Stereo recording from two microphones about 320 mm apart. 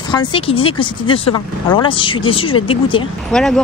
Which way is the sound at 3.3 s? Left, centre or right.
Centre.